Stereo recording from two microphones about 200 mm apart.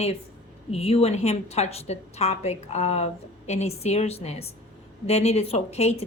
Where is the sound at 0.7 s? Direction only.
30° left (ahead or behind).